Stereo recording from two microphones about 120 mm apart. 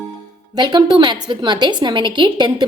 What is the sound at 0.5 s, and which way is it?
A woman's voice, 35° right (ahead or behind).